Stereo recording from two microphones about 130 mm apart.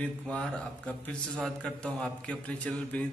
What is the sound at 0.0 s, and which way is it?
A man's voice, 10° left (ahead or behind).